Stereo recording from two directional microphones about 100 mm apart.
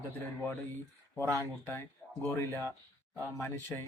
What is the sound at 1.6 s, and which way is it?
Speech, 20° left (ahead or behind).